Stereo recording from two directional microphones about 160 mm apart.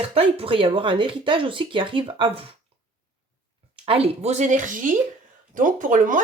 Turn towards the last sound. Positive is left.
turn(degrees=-55)  # may be behind; listen again after turning